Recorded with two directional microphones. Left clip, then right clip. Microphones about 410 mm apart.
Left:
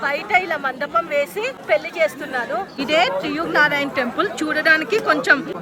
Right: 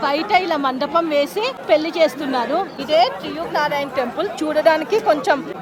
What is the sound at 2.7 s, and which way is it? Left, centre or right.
A woman's voice, centre.